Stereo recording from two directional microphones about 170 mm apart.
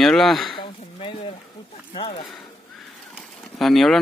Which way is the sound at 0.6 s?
30° left (ahead or behind).